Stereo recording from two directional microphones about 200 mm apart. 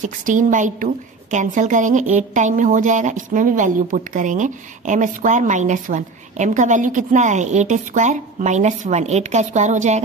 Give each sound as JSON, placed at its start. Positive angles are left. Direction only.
{"t": 0.0, "sound": "a woman's voice", "side_deg": -40}